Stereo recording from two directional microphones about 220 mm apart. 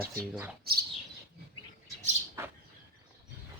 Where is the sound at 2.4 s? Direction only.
15° right (ahead or behind).